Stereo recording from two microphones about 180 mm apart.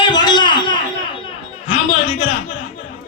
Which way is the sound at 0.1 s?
25° left (ahead or behind).